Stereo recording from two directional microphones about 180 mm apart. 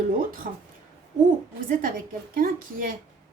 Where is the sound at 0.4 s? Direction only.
50° right (ahead or behind).